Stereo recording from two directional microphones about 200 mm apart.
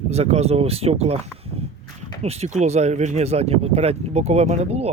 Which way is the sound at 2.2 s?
30° right (ahead or behind).